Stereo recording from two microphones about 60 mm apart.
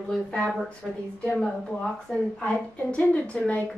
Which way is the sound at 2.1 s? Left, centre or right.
Centre.